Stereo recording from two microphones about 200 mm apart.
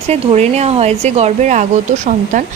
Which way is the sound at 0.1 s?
35° right (ahead or behind).